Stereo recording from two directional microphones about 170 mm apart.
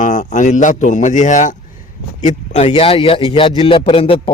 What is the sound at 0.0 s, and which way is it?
Speech, 50° left (ahead or behind).